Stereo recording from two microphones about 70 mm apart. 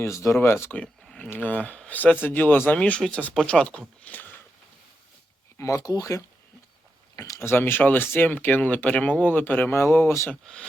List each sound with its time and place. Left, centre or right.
0.0 s speech: left
1.0 s a sound: centre
1.3 s speech: left
5.5 s speech: left
7.2 s speech: left
9.7 s speech: left
10.4 s speech: centre